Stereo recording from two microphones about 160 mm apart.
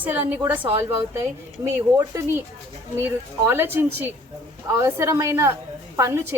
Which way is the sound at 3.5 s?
15° right (ahead or behind).